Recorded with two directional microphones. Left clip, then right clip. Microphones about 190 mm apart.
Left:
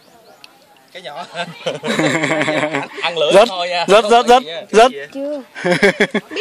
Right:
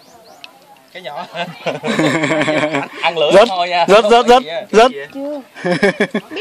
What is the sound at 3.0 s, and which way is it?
Speech, 50° left (ahead or behind).